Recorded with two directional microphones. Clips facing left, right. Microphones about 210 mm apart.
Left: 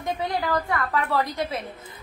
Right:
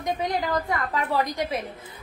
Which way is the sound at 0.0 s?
15° right (ahead or behind).